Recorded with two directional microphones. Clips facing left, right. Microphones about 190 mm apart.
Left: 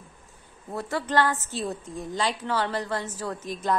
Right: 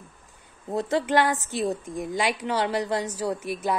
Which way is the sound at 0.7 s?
20° right (ahead or behind).